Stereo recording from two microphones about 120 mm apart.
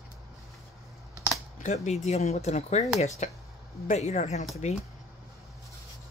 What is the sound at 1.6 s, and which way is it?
Speech, 70° left (ahead or behind).